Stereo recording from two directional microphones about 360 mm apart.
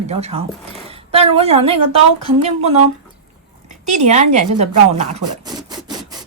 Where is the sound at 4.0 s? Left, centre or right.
Centre.